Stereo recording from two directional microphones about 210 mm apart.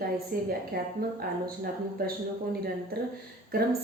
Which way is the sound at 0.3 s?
45° right (ahead or behind).